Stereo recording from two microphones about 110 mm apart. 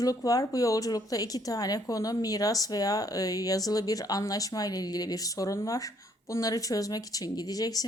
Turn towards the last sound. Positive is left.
turn(degrees=35)  # may be behind; listen again after turning